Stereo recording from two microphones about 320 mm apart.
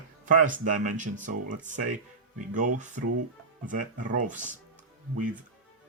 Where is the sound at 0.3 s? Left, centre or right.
Right.